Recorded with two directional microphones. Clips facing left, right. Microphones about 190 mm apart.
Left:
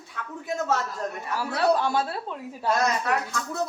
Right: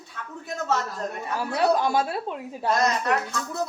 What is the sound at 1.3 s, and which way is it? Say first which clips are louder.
A woman's voice: right 1 dB; 15° right (ahead or behind).